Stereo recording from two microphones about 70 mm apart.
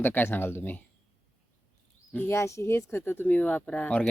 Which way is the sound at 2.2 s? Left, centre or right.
Left.